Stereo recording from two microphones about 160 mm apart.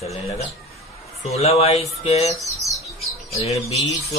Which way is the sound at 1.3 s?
40° left (ahead or behind).